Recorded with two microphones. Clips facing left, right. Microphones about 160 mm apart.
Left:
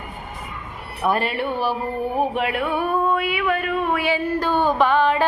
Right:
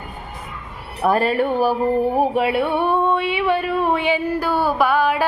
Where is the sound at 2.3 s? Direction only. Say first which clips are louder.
Right 4 dB; 30° right (ahead or behind).